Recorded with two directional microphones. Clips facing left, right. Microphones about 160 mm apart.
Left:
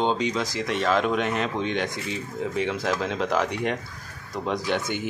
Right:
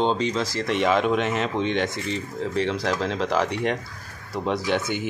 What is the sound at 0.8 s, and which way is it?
A woman's voice, 5° right (ahead or behind).